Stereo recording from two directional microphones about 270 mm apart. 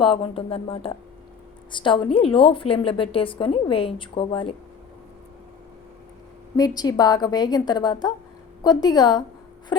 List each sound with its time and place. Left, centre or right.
0.0 s a woman's voice: centre
6.6 s a woman's voice: centre